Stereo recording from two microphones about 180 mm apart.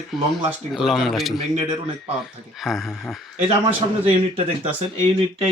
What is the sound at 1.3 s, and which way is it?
Speech, 40° right (ahead or behind).